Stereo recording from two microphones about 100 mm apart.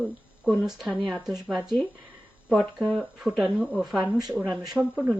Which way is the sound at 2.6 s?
5° left (ahead or behind).